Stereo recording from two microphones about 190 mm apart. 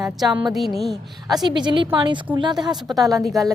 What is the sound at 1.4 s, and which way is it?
A woman's voice, 25° right (ahead or behind).